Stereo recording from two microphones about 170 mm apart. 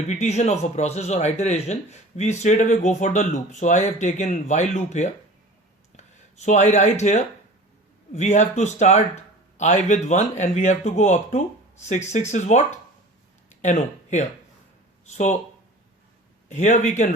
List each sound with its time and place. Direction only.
0.1 s speech: 45° left (ahead or behind)
16.5 s speech: 45° left (ahead or behind)